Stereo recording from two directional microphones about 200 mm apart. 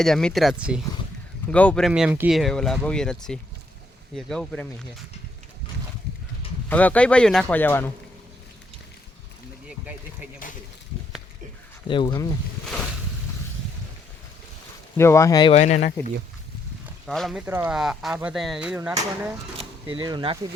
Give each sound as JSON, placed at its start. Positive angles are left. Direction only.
{"t": 0.0, "sound": "speech", "side_deg": 5}
{"t": 1.9, "sound": "speech", "side_deg": -5}
{"t": 6.7, "sound": "speech", "side_deg": 5}
{"t": 11.9, "sound": "speech", "side_deg": 20}
{"t": 14.9, "sound": "speech", "side_deg": 15}
{"t": 15.5, "sound": "speech", "side_deg": 35}
{"t": 16.8, "sound": "speech", "side_deg": 0}
{"t": 20.0, "sound": "speech", "side_deg": -20}